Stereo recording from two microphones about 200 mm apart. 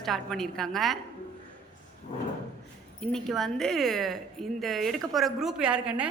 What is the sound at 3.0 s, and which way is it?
Speech, centre (ahead or behind).